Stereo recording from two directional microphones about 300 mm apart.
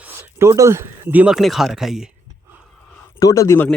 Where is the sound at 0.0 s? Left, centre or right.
Centre.